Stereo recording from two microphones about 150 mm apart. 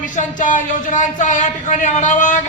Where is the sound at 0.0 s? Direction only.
60° left (ahead or behind).